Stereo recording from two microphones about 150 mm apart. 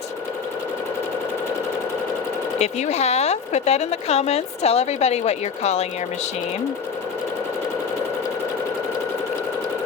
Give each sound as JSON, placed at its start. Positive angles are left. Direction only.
{"t": 2.6, "sound": "a woman's voice", "side_deg": 45}